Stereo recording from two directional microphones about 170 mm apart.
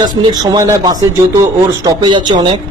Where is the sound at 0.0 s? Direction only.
25° right (ahead or behind).